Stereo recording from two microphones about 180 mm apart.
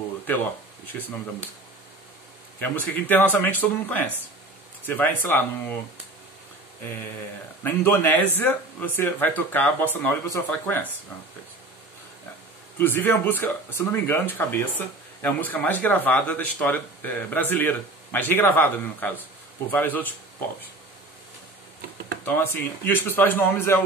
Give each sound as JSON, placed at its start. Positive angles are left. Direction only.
{"t": 2.6, "sound": "speech", "side_deg": 10}
{"t": 7.6, "sound": "speech", "side_deg": 10}
{"t": 12.7, "sound": "speech", "side_deg": 10}
{"t": 22.2, "sound": "speech", "side_deg": 10}